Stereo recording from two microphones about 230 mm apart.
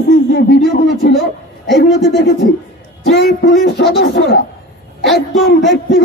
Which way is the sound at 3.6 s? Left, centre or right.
Left.